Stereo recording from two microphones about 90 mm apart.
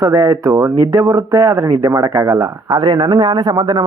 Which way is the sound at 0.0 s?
45° right (ahead or behind).